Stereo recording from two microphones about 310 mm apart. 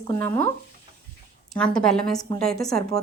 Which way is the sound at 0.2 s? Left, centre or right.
Centre.